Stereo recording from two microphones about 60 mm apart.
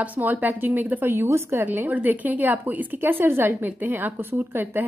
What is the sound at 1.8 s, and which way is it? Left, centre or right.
Speech, right.